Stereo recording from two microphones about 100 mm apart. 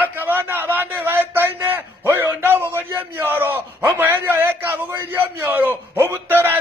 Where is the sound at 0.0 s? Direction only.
20° right (ahead or behind).